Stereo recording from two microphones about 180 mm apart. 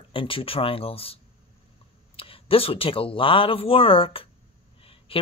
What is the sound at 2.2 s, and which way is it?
Speech, 30° left (ahead or behind).